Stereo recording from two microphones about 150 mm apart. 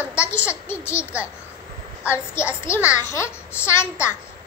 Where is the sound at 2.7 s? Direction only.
15° left (ahead or behind).